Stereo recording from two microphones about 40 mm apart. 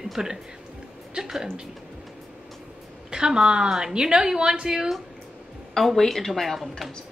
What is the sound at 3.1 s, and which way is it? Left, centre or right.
A woman's voice, centre.